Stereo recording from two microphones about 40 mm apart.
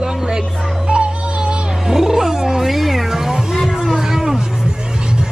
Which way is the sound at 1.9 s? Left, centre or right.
Centre.